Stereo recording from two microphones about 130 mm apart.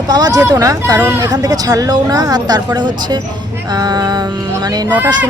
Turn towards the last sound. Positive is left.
turn(degrees=-15)  # may be behind; listen again after turning